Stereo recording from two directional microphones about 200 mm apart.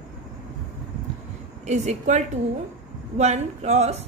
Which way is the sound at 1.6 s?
35° right (ahead or behind).